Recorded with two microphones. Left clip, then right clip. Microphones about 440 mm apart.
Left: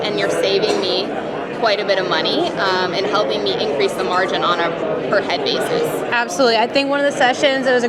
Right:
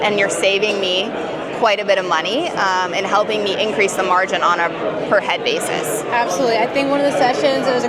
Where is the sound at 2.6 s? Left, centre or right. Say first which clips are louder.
Even; right.